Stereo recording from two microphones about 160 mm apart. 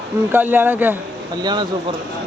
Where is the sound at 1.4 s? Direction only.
25° right (ahead or behind).